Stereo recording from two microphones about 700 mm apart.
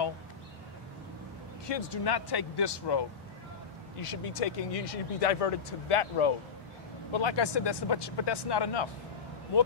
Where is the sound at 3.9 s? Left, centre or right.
Left.